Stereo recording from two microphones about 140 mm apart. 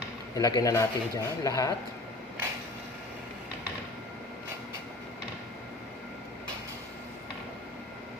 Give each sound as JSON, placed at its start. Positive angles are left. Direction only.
{"t": 0.3, "sound": "speech", "side_deg": 25}